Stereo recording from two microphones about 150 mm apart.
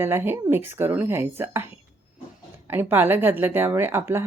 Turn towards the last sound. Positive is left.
turn(degrees=-15)  # may be behind; listen again after turning